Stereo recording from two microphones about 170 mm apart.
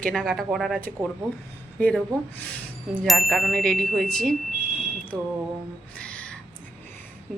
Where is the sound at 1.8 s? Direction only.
10° left (ahead or behind).